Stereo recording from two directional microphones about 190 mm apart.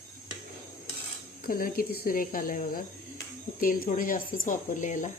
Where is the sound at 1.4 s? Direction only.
50° left (ahead or behind).